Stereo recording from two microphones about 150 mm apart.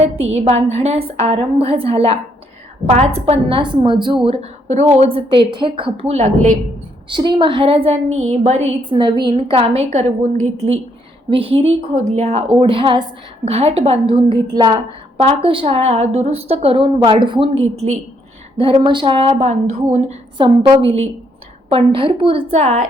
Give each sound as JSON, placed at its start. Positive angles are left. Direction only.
{"t": 0.0, "sound": "a woman's voice", "side_deg": -45}
{"t": 7.1, "sound": "a woman's voice", "side_deg": -30}
{"t": 11.9, "sound": "a woman's voice", "side_deg": -50}
{"t": 15.2, "sound": "a woman's voice", "side_deg": -40}
{"t": 20.4, "sound": "a woman's voice", "side_deg": -30}